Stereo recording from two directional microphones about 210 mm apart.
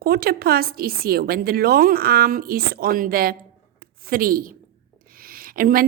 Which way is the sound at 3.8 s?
45° right (ahead or behind).